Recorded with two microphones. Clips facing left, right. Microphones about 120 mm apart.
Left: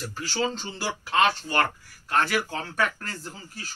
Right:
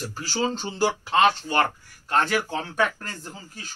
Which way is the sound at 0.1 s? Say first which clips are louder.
Right 1 dB; 35° right (ahead or behind).